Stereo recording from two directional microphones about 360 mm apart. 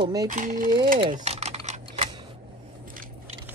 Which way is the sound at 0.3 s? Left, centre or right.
Right.